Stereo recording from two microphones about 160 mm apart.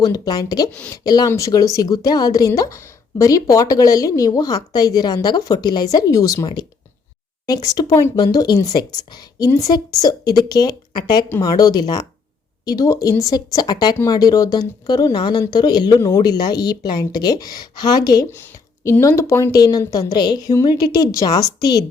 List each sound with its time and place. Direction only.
0.0 s speech: 25° left (ahead or behind)